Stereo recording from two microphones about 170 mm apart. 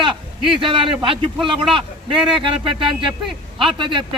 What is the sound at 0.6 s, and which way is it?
Speech, 30° right (ahead or behind).